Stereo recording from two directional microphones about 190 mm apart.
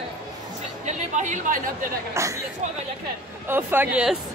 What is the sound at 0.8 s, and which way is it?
A woman's voice, 40° right (ahead or behind).